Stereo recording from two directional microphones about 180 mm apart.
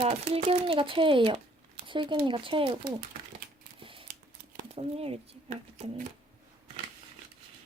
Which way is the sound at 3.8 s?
30° right (ahead or behind).